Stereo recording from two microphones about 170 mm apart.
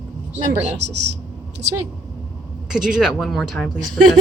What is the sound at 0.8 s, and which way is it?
Speech, 90° right.